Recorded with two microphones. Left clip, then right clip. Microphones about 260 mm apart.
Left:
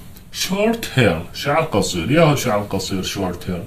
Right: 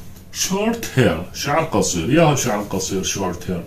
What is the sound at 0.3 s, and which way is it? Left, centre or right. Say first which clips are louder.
Speech: left 2 dB; left.